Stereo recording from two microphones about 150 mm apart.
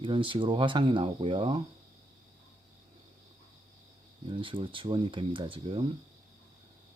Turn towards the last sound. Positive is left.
turn(degrees=-35)  # may be behind; listen again after turning